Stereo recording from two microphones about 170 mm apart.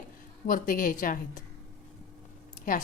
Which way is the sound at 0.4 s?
55° left (ahead or behind).